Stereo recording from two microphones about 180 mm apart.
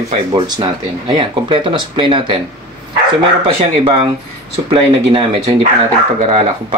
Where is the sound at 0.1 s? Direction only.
30° right (ahead or behind).